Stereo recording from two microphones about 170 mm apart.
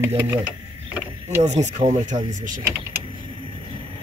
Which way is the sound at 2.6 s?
15° right (ahead or behind).